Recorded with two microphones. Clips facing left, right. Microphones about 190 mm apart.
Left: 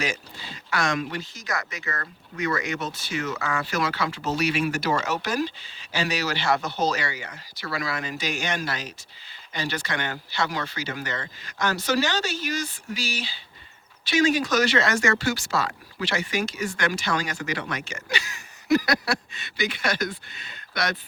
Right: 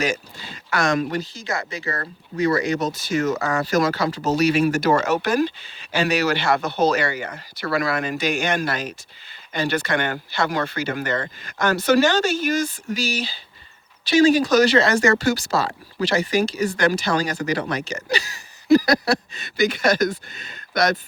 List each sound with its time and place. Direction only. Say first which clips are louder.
0.0 s speech: right 6 dB; 45° right (ahead or behind)